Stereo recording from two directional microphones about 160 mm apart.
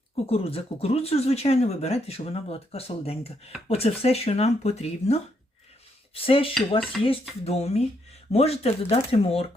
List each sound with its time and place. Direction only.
0.3 s speech: 35° left (ahead or behind)